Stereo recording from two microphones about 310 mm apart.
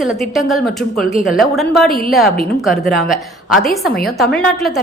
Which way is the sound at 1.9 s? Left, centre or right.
Left.